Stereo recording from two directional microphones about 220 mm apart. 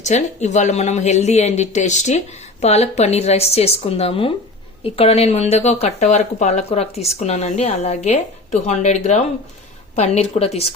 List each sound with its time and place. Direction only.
0.0 s speech: 30° left (ahead or behind)